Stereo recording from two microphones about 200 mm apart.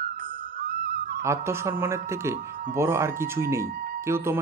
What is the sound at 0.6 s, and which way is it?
Music, 45° right (ahead or behind).